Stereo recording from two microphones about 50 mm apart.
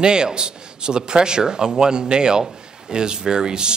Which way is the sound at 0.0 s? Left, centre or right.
Centre.